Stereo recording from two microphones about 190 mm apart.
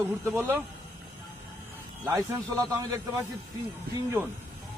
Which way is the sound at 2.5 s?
15° right (ahead or behind).